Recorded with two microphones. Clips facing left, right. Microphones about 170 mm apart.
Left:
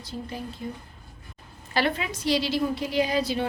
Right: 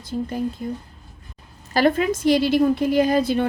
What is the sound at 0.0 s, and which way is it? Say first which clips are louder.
Speech: right 9 dB; 50° right (ahead or behind).